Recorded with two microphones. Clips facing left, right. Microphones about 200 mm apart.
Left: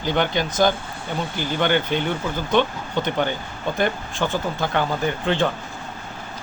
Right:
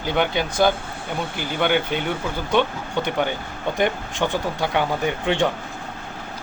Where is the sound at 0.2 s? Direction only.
5° right (ahead or behind).